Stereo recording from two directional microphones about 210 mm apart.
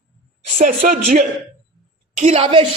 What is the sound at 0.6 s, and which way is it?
Speech, 45° right (ahead or behind).